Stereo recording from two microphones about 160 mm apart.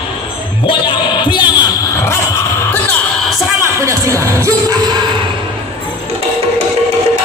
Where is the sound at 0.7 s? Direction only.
30° left (ahead or behind).